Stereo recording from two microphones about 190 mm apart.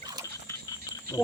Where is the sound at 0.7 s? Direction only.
15° left (ahead or behind).